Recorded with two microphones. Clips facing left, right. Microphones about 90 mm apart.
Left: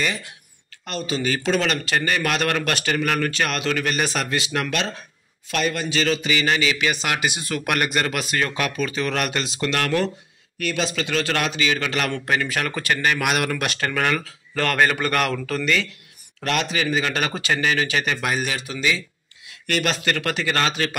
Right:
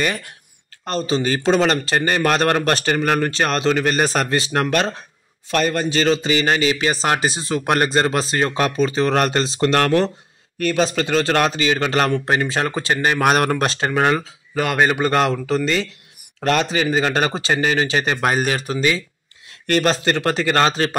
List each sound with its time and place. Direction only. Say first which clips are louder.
0.0 s speech: right 4 dB; 50° right (ahead or behind)
0.8 s speech: right 5 dB; 35° right (ahead or behind)
12.1 s speech: right 4 dB; 25° right (ahead or behind)
13.7 s speech: right 4 dB; 25° right (ahead or behind)
14.5 s speech: right 2 dB; 15° right (ahead or behind); by 20.9 s 35° right (ahead or behind)